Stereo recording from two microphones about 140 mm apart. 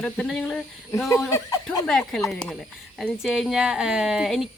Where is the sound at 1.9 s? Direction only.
5° left (ahead or behind).